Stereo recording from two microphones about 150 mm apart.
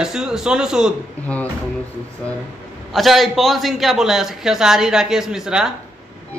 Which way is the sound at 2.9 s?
Centre (ahead or behind).